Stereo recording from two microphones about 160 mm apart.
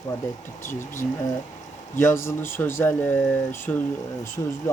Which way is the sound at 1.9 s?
15° left (ahead or behind).